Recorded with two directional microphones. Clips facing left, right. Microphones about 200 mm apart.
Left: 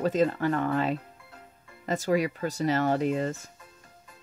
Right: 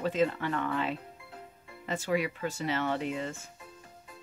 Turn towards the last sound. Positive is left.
turn(degrees=40)  # may be behind; listen again after turning